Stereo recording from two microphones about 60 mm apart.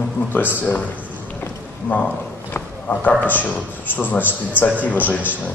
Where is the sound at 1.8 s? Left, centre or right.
Left.